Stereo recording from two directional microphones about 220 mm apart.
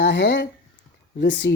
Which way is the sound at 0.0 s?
50° left (ahead or behind).